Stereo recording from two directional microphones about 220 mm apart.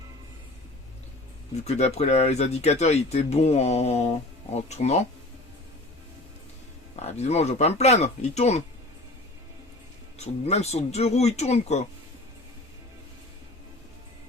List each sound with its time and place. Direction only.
1.5 s speech: 30° left (ahead or behind)
6.9 s speech: 30° left (ahead or behind)
10.2 s speech: 30° left (ahead or behind)